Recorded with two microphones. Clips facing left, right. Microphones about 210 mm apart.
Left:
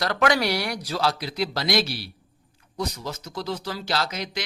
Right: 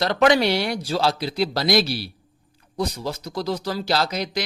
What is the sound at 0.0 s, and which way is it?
A man's voice, 25° right (ahead or behind).